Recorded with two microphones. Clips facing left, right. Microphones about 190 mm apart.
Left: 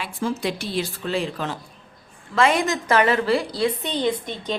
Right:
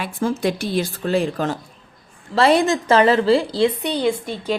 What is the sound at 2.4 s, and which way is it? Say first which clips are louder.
A woman's voice: right 4 dB; 35° right (ahead or behind).